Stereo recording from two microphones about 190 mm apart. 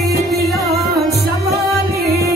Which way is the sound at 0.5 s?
55° right (ahead or behind).